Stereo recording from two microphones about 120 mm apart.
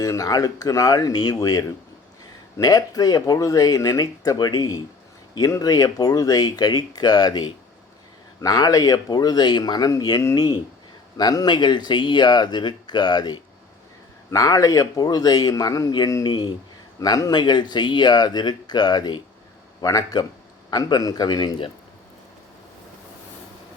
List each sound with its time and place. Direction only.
0.0 s a man's voice: 30° left (ahead or behind)